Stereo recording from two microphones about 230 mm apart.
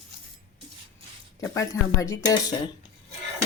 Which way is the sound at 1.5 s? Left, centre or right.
Centre.